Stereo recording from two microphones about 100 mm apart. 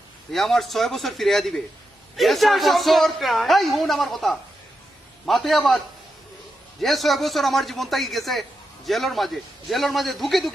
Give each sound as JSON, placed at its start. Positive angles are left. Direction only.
{"t": 0.3, "sound": "a man's voice", "side_deg": 0}
{"t": 6.8, "sound": "a man's voice", "side_deg": 0}